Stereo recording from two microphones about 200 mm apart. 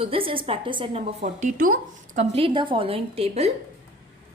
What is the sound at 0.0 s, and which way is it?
A woman's voice, 25° right (ahead or behind).